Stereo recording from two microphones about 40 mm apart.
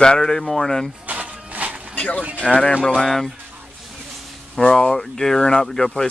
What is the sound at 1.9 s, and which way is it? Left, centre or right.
Speech, left.